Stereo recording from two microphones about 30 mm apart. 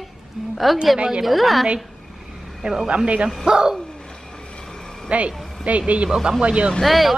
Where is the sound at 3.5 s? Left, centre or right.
Right.